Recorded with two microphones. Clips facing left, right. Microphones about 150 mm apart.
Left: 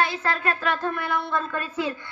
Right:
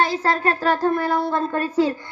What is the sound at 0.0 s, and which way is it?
Speech, 35° right (ahead or behind).